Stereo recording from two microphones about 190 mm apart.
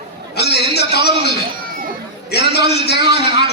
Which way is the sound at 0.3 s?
60° left (ahead or behind).